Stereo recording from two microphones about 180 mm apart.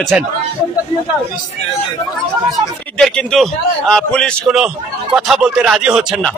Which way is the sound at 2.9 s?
Centre (ahead or behind).